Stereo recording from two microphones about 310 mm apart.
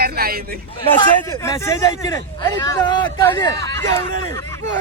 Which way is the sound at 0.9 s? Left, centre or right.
Centre.